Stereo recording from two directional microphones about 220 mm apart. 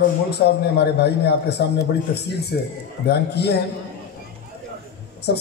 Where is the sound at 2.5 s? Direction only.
50° left (ahead or behind).